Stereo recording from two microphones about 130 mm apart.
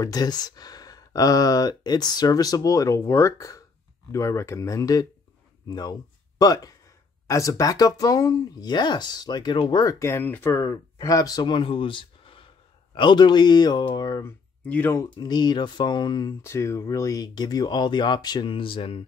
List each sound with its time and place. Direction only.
0.0 s speech: 30° left (ahead or behind)
14.6 s speech: 10° left (ahead or behind)
15.0 s speech: 35° left (ahead or behind)
16.4 s speech: 20° left (ahead or behind); by 19.0 s 45° left (ahead or behind)